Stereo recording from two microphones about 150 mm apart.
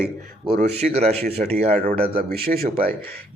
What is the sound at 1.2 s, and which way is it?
Speech, 90° right.